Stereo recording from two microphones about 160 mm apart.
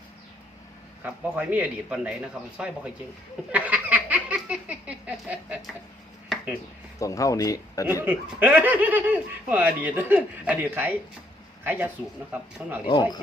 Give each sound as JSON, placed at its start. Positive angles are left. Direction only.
{"t": 1.0, "sound": "speech", "side_deg": -10}
{"t": 3.5, "sound": "a sound", "side_deg": -10}
{"t": 7.0, "sound": "speech", "side_deg": 20}
{"t": 8.0, "sound": "speech", "side_deg": -10}
{"t": 12.8, "sound": "speech", "side_deg": 30}